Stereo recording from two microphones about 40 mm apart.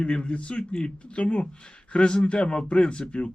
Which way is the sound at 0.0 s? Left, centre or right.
Left.